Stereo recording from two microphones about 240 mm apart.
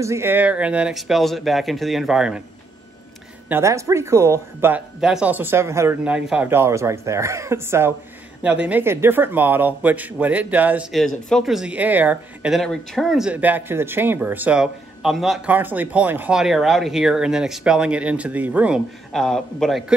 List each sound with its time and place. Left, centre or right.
0.0 s speech: centre
3.4 s speech: centre